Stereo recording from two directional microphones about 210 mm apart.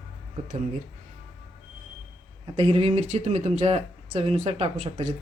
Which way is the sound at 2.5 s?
25° right (ahead or behind).